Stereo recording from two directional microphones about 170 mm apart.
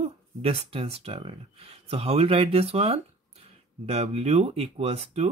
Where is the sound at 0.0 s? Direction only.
35° right (ahead or behind).